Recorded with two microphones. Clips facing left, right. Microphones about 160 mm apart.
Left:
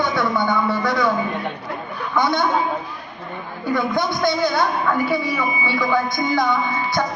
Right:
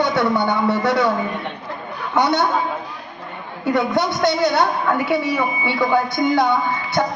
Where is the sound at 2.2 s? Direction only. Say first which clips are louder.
Right 2 dB; 70° right (ahead or behind).